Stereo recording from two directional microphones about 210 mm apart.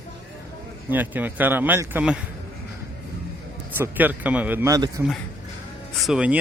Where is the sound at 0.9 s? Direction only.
10° right (ahead or behind).